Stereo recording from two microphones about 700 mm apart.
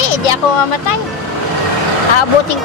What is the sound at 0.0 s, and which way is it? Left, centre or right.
Vehicle, left.